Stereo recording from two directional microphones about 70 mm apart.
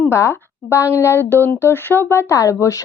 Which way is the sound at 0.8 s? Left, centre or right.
Left.